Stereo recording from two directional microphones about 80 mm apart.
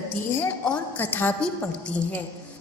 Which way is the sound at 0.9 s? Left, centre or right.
Left.